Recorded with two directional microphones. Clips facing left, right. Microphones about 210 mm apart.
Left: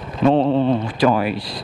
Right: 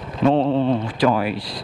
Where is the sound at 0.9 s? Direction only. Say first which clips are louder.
Left 2 dB; 15° left (ahead or behind).